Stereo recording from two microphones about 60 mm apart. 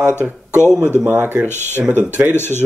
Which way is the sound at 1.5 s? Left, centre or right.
Left.